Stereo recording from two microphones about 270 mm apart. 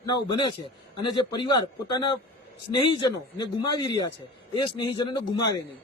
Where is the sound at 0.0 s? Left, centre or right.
Centre.